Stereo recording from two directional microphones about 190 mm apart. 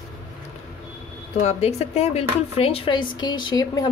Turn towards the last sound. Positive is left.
turn(degrees=20)  # may be behind; listen again after turning